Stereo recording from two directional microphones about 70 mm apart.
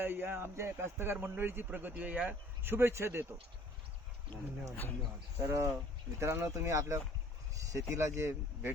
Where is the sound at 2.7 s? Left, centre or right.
Right.